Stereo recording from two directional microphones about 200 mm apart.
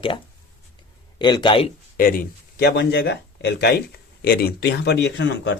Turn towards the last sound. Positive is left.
turn(degrees=65)  # may be behind; listen again after turning